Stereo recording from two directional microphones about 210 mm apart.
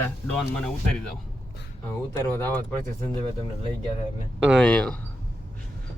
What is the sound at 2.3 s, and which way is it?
Speech, 10° left (ahead or behind).